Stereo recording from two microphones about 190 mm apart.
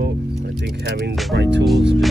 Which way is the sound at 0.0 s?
60° right (ahead or behind).